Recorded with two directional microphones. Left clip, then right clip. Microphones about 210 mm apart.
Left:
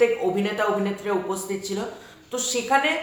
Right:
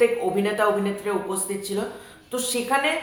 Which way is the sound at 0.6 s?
5° right (ahead or behind).